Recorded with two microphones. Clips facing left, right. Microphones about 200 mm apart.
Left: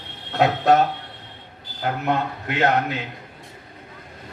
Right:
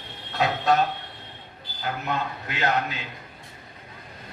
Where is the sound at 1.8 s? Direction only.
60° left (ahead or behind).